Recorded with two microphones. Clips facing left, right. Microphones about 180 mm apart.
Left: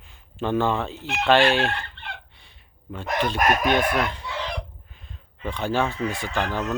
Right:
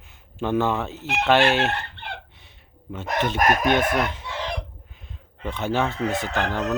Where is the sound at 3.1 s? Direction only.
20° right (ahead or behind).